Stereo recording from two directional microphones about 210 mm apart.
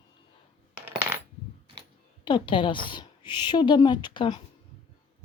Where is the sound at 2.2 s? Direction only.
20° left (ahead or behind).